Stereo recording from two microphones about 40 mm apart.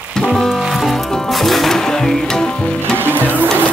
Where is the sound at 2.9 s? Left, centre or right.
Right.